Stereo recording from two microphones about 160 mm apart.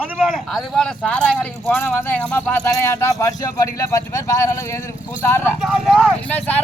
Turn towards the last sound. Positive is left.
turn(degrees=10)  # may be behind; listen again after turning